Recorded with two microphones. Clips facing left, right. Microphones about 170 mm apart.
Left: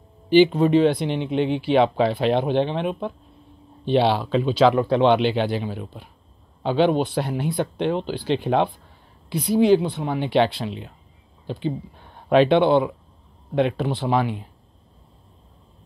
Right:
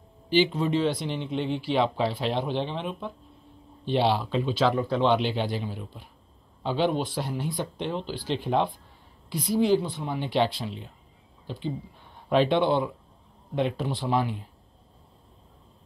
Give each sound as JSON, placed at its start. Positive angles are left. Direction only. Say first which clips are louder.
{"t": 0.3, "sound": "speech", "louder": "left 8 dB", "side_deg": 60}
{"t": 11.5, "sound": "speech", "louder": "left 6 dB", "side_deg": 65}